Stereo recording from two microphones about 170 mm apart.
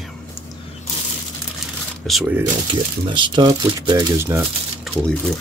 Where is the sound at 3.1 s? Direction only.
30° right (ahead or behind).